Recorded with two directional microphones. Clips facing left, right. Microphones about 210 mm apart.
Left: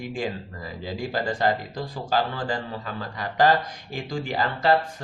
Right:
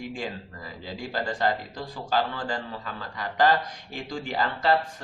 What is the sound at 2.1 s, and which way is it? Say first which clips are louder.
A man's voice: left 2 dB; 15° left (ahead or behind).